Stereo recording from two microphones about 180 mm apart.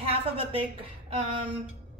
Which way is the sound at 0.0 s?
35° right (ahead or behind).